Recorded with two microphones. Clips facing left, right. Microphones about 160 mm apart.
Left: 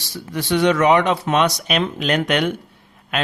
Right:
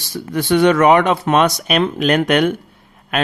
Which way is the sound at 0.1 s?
55° right (ahead or behind).